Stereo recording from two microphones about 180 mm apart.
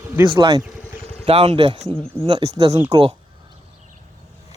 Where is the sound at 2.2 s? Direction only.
25° right (ahead or behind).